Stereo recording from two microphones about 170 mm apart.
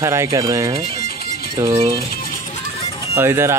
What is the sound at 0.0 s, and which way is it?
Speech, 15° right (ahead or behind).